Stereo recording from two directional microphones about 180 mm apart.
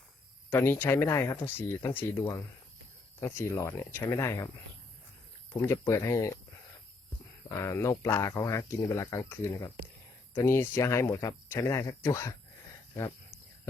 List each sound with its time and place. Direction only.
0.5 s speech: 10° left (ahead or behind)
5.5 s speech: 20° left (ahead or behind)
7.4 s speech: 15° left (ahead or behind)